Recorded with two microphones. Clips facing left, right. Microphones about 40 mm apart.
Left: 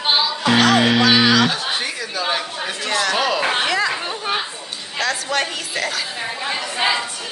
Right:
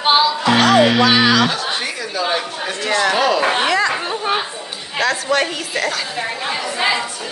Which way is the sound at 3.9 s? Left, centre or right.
Centre.